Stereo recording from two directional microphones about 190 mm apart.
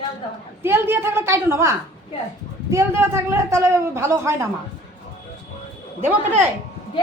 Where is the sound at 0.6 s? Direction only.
10° right (ahead or behind).